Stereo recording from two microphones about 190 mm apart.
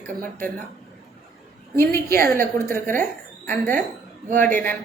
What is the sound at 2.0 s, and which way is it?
Speech, 50° right (ahead or behind).